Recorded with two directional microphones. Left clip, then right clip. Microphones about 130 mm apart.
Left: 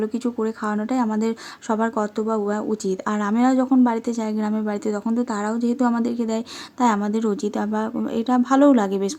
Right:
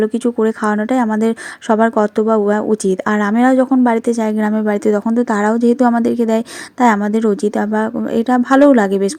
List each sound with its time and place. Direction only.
0.0 s a woman's voice: 40° right (ahead or behind)